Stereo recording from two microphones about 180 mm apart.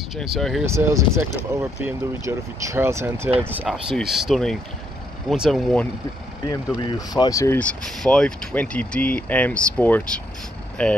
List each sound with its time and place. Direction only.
0.1 s speech: centre (ahead or behind)
0.7 s speech: 15° right (ahead or behind); by 5.9 s centre (ahead or behind)
6.8 s speech: 20° left (ahead or behind); by 10.9 s 5° left (ahead or behind)